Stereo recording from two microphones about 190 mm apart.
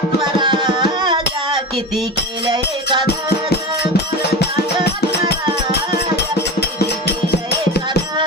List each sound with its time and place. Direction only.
0.3 s music: 25° right (ahead or behind)
2.5 s music: 25° right (ahead or behind)
4.4 s music: 60° left (ahead or behind)
6.1 s music: 60° left (ahead or behind)